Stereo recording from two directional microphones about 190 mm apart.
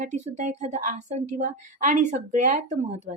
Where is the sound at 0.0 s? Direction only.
40° right (ahead or behind).